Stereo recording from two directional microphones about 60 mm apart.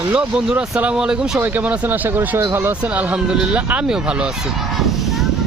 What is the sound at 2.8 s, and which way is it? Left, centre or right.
Speech, right.